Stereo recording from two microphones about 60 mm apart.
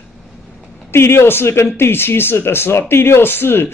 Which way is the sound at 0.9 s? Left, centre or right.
Left.